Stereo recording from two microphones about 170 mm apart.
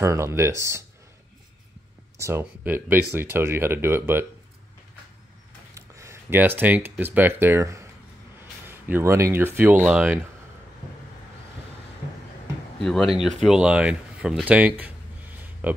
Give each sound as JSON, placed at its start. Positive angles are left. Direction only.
{"t": 0.0, "sound": "speech", "side_deg": -15}
{"t": 2.1, "sound": "speech", "side_deg": -15}
{"t": 5.8, "sound": "speech", "side_deg": -15}
{"t": 12.8, "sound": "speech", "side_deg": 0}